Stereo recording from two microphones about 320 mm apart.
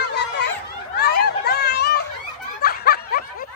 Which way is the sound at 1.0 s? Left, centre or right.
Left.